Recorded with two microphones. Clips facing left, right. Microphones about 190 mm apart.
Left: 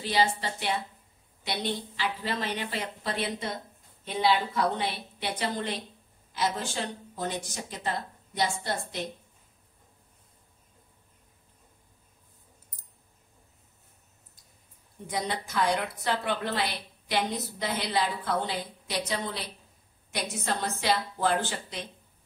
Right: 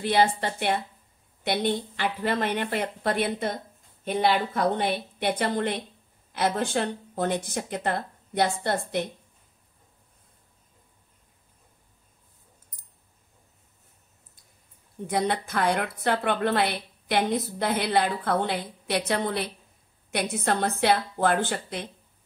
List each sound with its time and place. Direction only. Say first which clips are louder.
0.0 s a woman's voice: right 4 dB; 55° right (ahead or behind)
15.0 s a woman's voice: right 6 dB; 60° right (ahead or behind)